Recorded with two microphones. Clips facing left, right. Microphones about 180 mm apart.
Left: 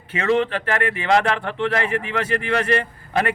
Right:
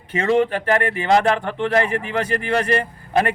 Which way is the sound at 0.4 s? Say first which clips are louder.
Right 3 dB; 45° right (ahead or behind).